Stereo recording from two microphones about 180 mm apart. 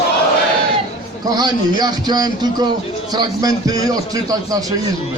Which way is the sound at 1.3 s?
20° right (ahead or behind).